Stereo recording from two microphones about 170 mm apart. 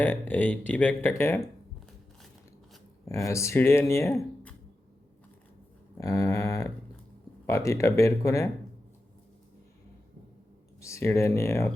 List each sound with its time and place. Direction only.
0.0 s speech: 10° left (ahead or behind)
3.1 s speech: 15° left (ahead or behind)
6.0 s speech: 20° left (ahead or behind)
10.8 s speech: 15° left (ahead or behind)